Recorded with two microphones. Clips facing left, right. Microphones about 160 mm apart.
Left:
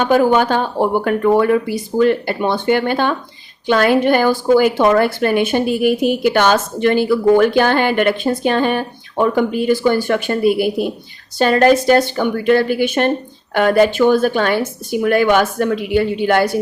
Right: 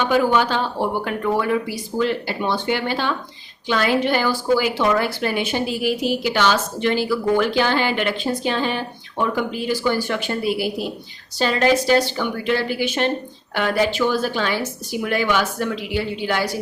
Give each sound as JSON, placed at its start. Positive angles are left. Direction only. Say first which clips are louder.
{"t": 0.0, "sound": "a woman's voice", "louder": "left 5 dB", "side_deg": 45}